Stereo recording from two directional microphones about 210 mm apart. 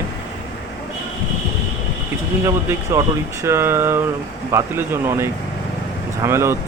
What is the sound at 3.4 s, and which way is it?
Speech, 10° right (ahead or behind).